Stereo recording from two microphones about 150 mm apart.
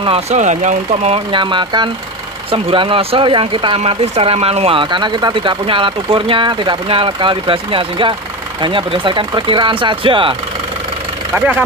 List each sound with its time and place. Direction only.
0.0 s speech: 45° right (ahead or behind)
1.3 s speech: 30° right (ahead or behind)
11.3 s speech: 10° right (ahead or behind)